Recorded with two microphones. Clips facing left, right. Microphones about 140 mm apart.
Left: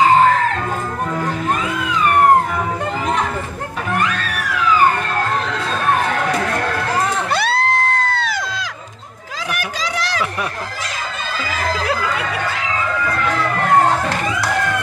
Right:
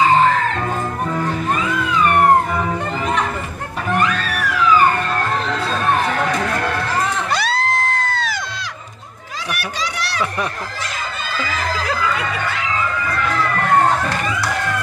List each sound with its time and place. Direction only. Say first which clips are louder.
7.3 s music: left 3 dB; 60° left (ahead or behind)